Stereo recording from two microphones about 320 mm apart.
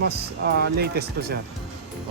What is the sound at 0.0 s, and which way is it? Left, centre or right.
Speech, right.